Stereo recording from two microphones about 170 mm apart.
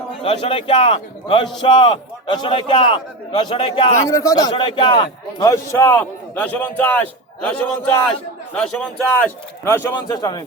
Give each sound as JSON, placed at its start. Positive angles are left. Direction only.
{"t": 0.2, "sound": "a man's voice", "side_deg": 30}
{"t": 3.9, "sound": "a man's voice", "side_deg": 20}
{"t": 5.5, "sound": "a man's voice", "side_deg": 15}
{"t": 9.9, "sound": "a man's voice", "side_deg": 25}